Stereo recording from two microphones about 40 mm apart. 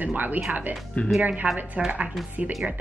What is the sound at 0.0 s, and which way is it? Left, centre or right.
Speech, right.